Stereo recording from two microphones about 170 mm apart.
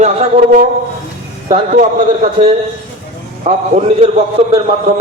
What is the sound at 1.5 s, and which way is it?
Speech, 40° right (ahead or behind).